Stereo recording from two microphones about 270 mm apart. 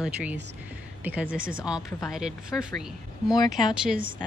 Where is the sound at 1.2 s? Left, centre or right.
Right.